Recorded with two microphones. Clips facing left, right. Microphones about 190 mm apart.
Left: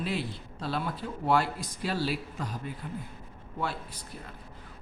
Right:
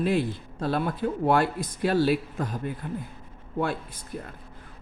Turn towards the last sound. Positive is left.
turn(degrees=-55)  # may be behind; listen again after turning